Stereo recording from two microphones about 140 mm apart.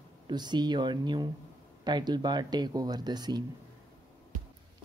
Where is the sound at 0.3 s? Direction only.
30° right (ahead or behind).